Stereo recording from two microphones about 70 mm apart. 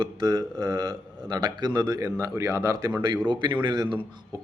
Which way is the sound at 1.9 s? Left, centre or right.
Right.